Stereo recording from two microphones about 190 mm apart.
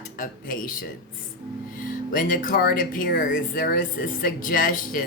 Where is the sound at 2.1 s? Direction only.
45° left (ahead or behind).